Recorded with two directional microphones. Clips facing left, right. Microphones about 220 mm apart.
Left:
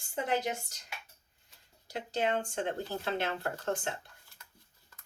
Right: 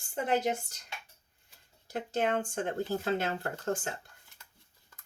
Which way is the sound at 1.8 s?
50° right (ahead or behind).